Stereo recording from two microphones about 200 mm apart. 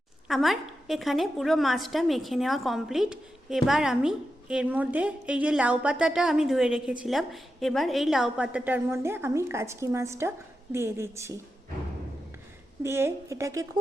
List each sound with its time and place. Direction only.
0.3 s a woman's voice: centre (ahead or behind)
12.8 s a woman's voice: 10° right (ahead or behind)